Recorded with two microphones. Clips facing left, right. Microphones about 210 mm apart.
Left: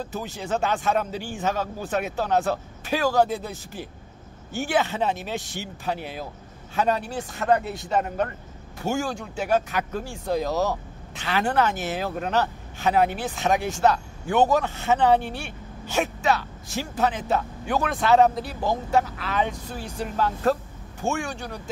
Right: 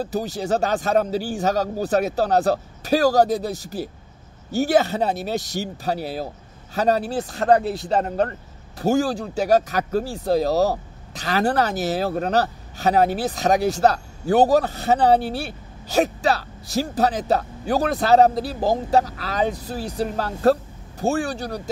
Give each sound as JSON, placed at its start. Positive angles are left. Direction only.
{"t": 0.0, "sound": "speech", "side_deg": -35}